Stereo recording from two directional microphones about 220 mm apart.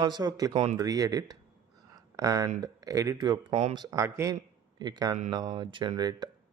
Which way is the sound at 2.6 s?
15° right (ahead or behind).